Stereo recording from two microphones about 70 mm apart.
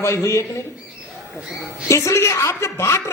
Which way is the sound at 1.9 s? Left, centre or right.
Left.